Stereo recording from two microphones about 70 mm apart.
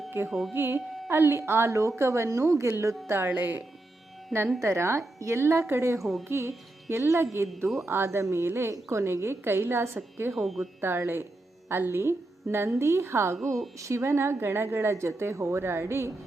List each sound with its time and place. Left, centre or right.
0.3 s speech: centre
0.5 s a woman's voice: right
3.1 s speech: right
4.6 s a woman's voice: right
6.0 s speech: centre
6.2 s a woman's voice: right
10.3 s speech: centre
10.8 s a woman's voice: right